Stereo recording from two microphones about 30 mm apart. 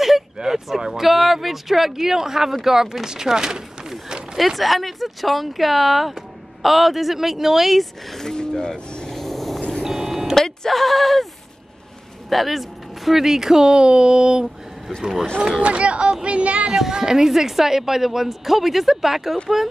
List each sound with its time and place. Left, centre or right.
0.4 s a sound: right
0.7 s a woman's voice: centre
1.0 s a woman's voice: centre
4.4 s speech: centre
8.4 s a sound: left
9.0 s vehicle: centre
9.6 s vehicle: left
9.8 s vehicle: centre
10.3 s speech: centre
12.3 s speech: centre; by 14.4 s right
15.6 s a sound: right
16.7 s a woman's voice: centre